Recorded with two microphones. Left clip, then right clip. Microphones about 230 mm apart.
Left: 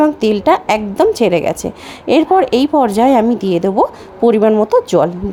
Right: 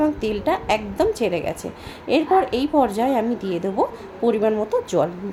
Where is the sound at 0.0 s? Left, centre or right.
Left.